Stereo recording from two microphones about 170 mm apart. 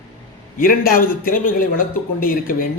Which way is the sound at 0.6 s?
55° left (ahead or behind).